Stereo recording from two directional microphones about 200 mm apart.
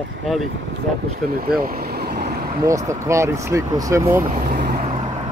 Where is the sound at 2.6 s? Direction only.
15° right (ahead or behind).